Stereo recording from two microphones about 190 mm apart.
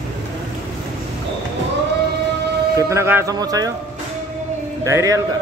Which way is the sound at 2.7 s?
15° right (ahead or behind).